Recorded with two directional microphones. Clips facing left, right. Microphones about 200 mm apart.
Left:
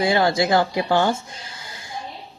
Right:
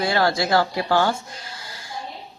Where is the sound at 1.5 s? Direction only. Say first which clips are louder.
Even; 20° left (ahead or behind).